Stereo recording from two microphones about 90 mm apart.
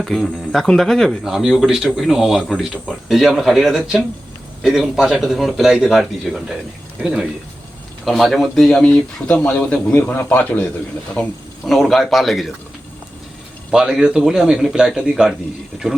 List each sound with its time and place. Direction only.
0.0 s a man's voice: centre (ahead or behind)
11.6 s speech: centre (ahead or behind)
13.7 s a man's voice: 5° right (ahead or behind)